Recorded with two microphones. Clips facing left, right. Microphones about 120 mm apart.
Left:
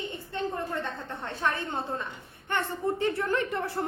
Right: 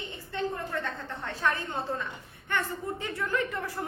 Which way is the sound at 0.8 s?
25° left (ahead or behind).